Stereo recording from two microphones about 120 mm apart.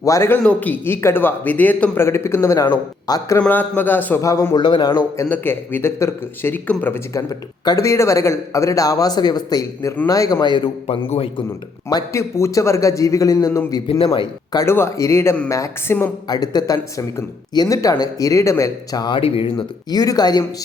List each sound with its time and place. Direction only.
0.0 s a man's voice: 25° left (ahead or behind)
3.3 s a man's voice: 15° left (ahead or behind)
4.5 s speech: 40° left (ahead or behind)
5.3 s a man's voice: 15° left (ahead or behind); by 11.4 s 50° left (ahead or behind)
11.9 s a man's voice: 30° left (ahead or behind)
16.3 s speech: 35° left (ahead or behind)
19.5 s speech: 35° left (ahead or behind)